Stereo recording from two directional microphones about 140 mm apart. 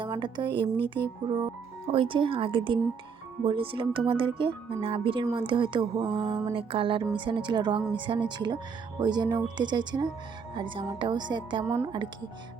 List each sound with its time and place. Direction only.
0.2 s speech: 35° right (ahead or behind)
11.6 s a woman's voice: 15° right (ahead or behind)